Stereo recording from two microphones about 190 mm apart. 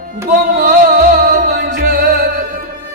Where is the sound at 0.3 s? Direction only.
50° right (ahead or behind).